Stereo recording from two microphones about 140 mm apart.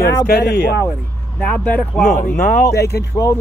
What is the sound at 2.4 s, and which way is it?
Speech, 80° left.